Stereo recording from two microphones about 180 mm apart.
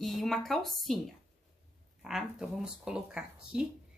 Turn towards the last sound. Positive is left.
turn(degrees=-5)  # may be behind; listen again after turning